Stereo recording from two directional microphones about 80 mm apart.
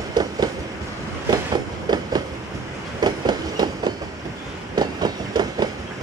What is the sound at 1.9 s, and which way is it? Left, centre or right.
Train, right.